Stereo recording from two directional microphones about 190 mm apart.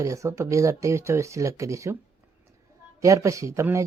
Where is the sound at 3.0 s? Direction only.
15° right (ahead or behind).